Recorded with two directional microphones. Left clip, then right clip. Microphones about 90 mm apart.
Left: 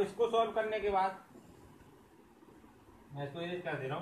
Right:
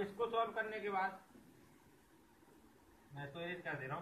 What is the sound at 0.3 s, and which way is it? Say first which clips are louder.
Speech: left 7 dB; 35° left (ahead or behind).